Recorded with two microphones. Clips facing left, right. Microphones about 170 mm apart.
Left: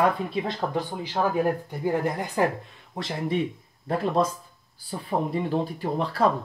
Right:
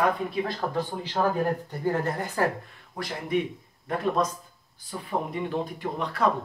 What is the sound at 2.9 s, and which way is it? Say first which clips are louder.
Speech: even; 25° left (ahead or behind).